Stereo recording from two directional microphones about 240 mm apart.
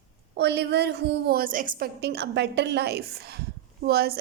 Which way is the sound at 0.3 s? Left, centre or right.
Right.